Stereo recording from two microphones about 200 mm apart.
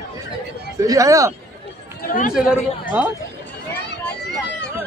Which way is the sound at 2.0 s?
45° left (ahead or behind).